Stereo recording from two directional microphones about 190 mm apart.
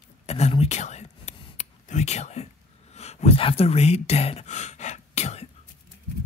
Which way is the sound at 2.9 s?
35° left (ahead or behind).